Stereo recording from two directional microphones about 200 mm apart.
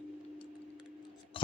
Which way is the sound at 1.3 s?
25° left (ahead or behind).